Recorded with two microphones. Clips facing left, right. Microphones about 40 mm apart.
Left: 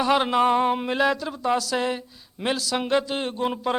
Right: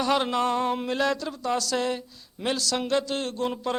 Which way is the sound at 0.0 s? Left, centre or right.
Centre.